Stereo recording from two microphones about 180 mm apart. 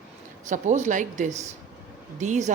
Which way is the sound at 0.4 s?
40° right (ahead or behind).